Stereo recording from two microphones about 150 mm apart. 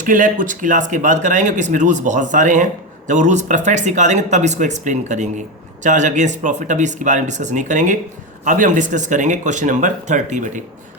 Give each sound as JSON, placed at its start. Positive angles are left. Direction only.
{"t": 0.0, "sound": "speech", "side_deg": -60}